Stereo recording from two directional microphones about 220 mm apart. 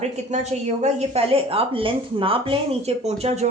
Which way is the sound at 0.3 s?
30° right (ahead or behind).